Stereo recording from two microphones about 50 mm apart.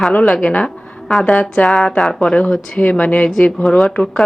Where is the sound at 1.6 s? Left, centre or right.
Centre.